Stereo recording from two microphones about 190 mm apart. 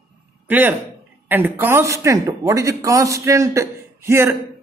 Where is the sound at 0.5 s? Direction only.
10° right (ahead or behind).